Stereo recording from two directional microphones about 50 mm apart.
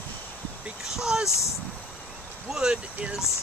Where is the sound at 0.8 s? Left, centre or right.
Centre.